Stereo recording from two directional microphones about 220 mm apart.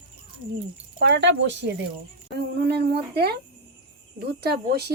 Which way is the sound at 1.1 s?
55° right (ahead or behind).